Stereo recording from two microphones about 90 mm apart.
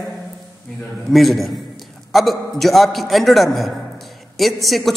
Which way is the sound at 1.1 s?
Centre (ahead or behind).